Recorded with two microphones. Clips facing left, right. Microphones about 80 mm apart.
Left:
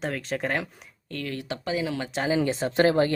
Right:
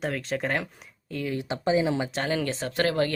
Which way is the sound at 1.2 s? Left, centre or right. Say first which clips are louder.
Right 3 dB; centre.